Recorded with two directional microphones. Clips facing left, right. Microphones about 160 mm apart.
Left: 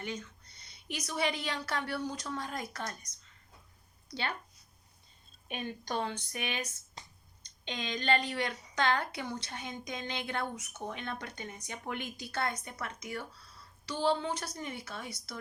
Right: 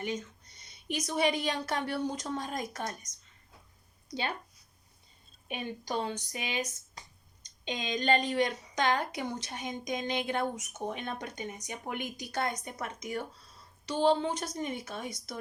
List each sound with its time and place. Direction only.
0.0 s a woman's voice: 15° right (ahead or behind)
6.0 s a woman's voice: 15° right (ahead or behind)